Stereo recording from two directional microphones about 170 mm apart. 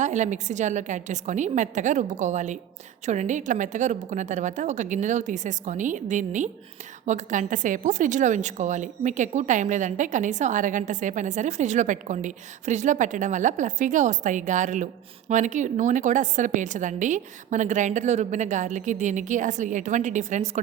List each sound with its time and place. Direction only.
0.0 s a woman's voice: 45° right (ahead or behind)